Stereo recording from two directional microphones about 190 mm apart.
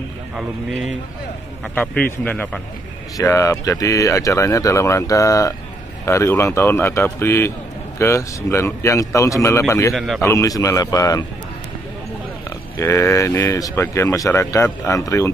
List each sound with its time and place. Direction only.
1.8 s speech: 10° left (ahead or behind)
9.9 s speech: centre (ahead or behind)
10.2 s speech: 15° left (ahead or behind)
12.4 s speech: 15° left (ahead or behind)